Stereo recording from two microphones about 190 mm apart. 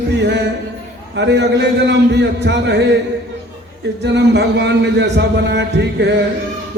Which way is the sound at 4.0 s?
65° right (ahead or behind).